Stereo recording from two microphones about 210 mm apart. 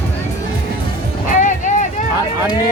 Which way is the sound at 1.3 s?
35° left (ahead or behind).